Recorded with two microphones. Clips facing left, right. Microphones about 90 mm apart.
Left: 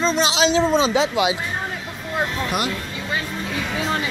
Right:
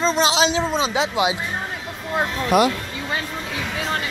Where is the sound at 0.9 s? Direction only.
20° right (ahead or behind).